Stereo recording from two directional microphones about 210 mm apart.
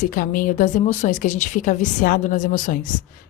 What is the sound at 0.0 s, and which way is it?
A woman's voice, 40° left (ahead or behind).